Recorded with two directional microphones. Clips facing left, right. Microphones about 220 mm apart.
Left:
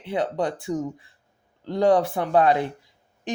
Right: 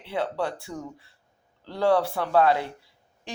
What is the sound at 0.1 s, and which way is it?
Speech, 20° left (ahead or behind).